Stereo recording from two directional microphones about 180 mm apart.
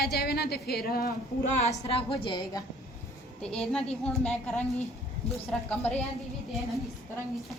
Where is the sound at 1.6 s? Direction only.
35° left (ahead or behind).